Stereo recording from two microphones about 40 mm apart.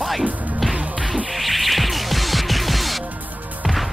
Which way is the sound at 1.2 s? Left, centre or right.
Centre.